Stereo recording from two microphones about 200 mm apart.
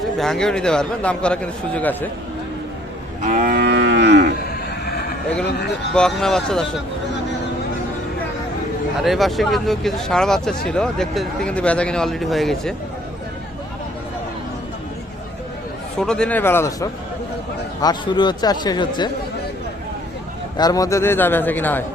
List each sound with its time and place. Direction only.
0.2 s speech: 5° left (ahead or behind)
3.2 s moo: 45° right (ahead or behind); by 4.3 s 60° right (ahead or behind)
5.9 s speech: centre (ahead or behind)
9.0 s speech: centre (ahead or behind)
16.0 s a man's voice: 5° left (ahead or behind); by 19.1 s 20° left (ahead or behind)
20.6 s a man's voice: 20° left (ahead or behind)